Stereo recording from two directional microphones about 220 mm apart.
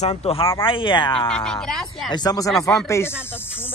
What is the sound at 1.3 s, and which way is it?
Speech, 5° left (ahead or behind).